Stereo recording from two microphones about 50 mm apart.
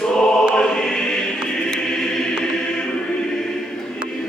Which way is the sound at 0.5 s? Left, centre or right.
Centre.